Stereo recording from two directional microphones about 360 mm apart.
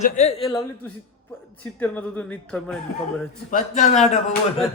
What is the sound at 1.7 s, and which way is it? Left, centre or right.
A man's voice, centre.